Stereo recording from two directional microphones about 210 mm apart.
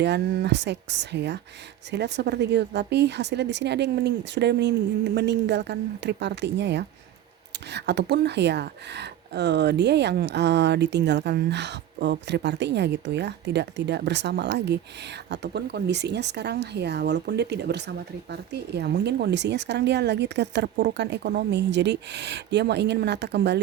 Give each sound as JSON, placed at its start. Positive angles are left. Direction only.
{"t": 0.0, "sound": "speech", "side_deg": -55}